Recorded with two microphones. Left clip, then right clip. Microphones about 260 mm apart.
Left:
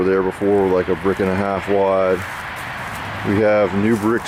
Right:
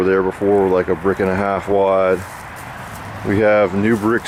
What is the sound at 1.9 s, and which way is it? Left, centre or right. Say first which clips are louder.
Speech: right 2 dB; centre.